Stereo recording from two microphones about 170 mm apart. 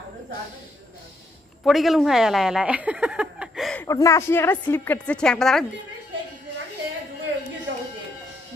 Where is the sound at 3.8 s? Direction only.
20° left (ahead or behind).